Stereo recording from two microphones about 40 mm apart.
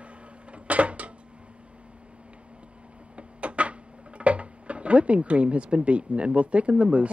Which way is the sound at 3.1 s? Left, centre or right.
Right.